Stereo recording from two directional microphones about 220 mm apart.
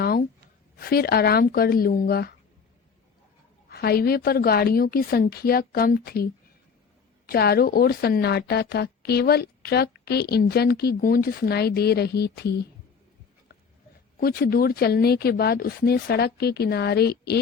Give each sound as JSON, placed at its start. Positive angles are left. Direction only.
{"t": 0.0, "sound": "a sound", "side_deg": 45}
{"t": 0.8, "sound": "speech", "side_deg": 45}
{"t": 3.7, "sound": "speech", "side_deg": 45}
{"t": 14.2, "sound": "speech", "side_deg": 40}